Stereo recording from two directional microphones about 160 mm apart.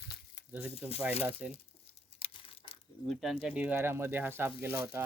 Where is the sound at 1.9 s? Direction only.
35° left (ahead or behind).